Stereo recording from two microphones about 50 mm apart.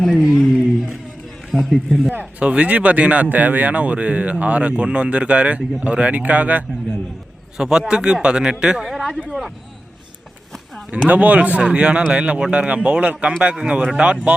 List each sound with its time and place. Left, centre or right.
0.0 s speech: centre
0.3 s a sound: centre
1.5 s speech: centre
2.4 s speech: right
7.5 s a man's voice: centre
10.9 s speech: right